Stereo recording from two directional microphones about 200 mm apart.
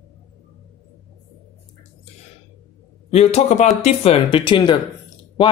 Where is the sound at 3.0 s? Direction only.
30° left (ahead or behind).